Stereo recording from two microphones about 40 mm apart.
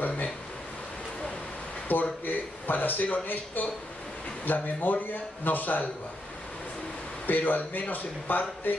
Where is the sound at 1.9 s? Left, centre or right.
Left.